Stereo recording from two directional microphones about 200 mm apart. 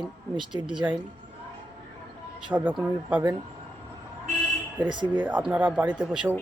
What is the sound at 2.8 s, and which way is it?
Speech, 10° right (ahead or behind).